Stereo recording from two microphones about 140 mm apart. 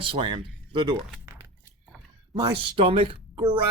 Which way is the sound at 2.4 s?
40° right (ahead or behind).